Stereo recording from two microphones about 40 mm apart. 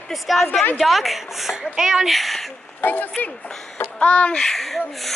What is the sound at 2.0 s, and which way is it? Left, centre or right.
Speech, centre.